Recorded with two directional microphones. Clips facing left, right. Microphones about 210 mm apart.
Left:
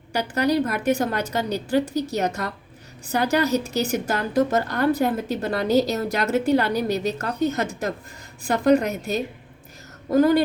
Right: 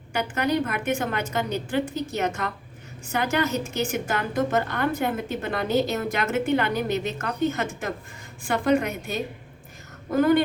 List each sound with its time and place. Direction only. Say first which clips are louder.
0.1 s a woman's voice: left 3 dB; 35° left (ahead or behind)